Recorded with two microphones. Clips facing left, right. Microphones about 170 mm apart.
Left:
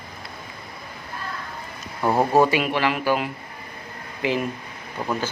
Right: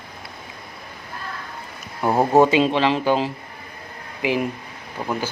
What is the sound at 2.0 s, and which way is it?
Speech, 15° right (ahead or behind).